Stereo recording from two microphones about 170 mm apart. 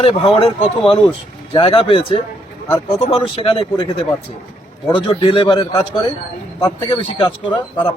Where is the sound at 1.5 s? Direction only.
35° left (ahead or behind).